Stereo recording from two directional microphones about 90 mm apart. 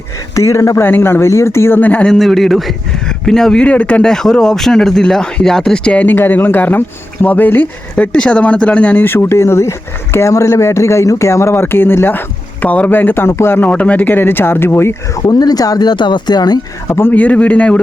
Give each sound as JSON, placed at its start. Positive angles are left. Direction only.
{"t": 0.3, "sound": "speech", "side_deg": 35}
{"t": 0.9, "sound": "speech", "side_deg": 25}
{"t": 2.1, "sound": "speech", "side_deg": 0}
{"t": 13.7, "sound": "speech", "side_deg": 15}
{"t": 15.3, "sound": "speech", "side_deg": 45}
{"t": 16.9, "sound": "speech", "side_deg": 25}